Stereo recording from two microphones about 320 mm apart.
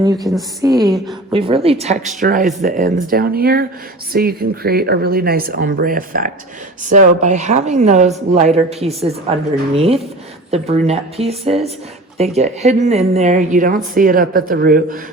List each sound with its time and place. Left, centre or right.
0.0 s a woman's voice: centre
0.8 s a woman's voice: centre
1.3 s a woman's voice: centre